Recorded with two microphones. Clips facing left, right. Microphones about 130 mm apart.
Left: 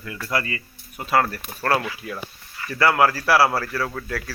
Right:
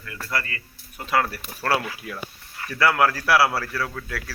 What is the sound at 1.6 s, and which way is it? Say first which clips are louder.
Speech: left 2 dB; 10° right (ahead or behind).